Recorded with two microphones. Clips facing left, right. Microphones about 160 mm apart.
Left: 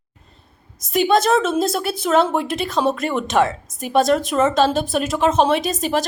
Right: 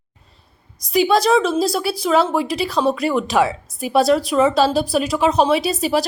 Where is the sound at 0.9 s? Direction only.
Centre (ahead or behind).